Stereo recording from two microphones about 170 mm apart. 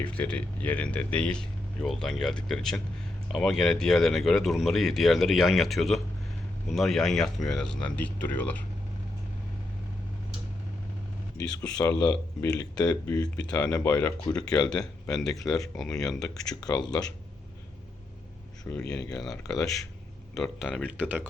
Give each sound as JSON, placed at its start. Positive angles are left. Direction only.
{"t": 0.0, "sound": "a man's voice", "side_deg": 5}
{"t": 11.8, "sound": "a man's voice", "side_deg": 15}
{"t": 16.6, "sound": "speech", "side_deg": 20}
{"t": 18.7, "sound": "speech", "side_deg": 15}
{"t": 19.1, "sound": "a man's voice", "side_deg": 0}